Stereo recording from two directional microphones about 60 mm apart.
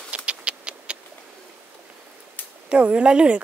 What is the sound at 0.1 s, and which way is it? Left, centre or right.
Vehicle, centre.